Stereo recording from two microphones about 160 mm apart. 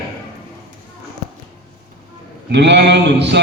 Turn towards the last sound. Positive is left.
turn(degrees=-90)